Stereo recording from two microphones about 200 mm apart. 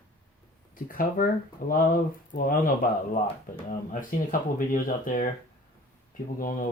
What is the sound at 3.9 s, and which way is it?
Speech, 40° left (ahead or behind).